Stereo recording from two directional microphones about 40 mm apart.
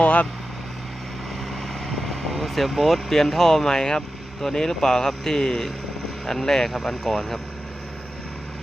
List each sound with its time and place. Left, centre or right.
0.0 s speech: left
1.5 s speech: centre